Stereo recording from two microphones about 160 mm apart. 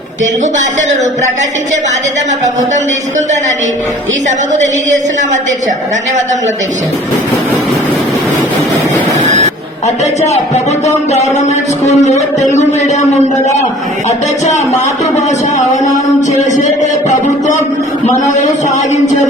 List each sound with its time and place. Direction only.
4.3 s a woman's voice: 50° right (ahead or behind)
9.2 s a sound: 45° right (ahead or behind)
9.8 s speech: 45° left (ahead or behind)
16.6 s speech: 50° left (ahead or behind)